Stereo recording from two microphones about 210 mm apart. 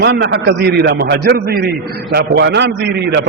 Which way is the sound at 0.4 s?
50° right (ahead or behind).